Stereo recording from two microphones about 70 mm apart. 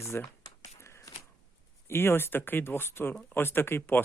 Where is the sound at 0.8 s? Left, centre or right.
Left.